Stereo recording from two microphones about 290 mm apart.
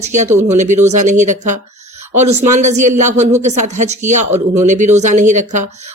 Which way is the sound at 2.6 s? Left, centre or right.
Right.